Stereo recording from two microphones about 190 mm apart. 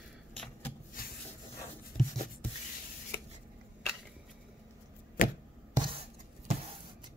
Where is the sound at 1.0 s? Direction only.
50° left (ahead or behind).